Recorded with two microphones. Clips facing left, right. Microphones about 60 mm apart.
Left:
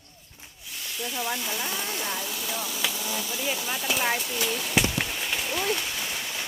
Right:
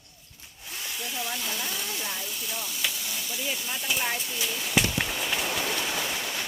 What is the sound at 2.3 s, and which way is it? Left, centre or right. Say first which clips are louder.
Chopping: left 3 dB; left.